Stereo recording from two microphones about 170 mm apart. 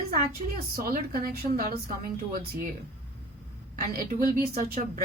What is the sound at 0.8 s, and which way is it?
Speech, 60° right (ahead or behind).